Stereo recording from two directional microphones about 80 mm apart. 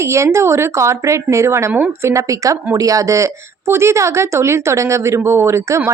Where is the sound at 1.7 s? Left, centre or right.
Centre.